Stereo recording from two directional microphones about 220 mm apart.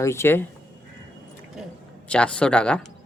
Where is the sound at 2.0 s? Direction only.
5° left (ahead or behind).